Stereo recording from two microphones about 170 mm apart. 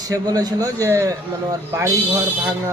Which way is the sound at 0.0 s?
20° right (ahead or behind).